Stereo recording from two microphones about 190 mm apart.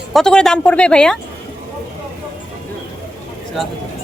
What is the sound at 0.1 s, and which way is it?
Speech, 5° left (ahead or behind).